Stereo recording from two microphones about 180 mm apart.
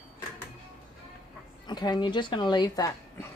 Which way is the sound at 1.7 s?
25° left (ahead or behind).